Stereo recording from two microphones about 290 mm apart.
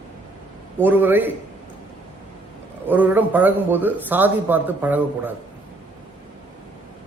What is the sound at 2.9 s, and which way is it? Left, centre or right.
A man's voice, centre.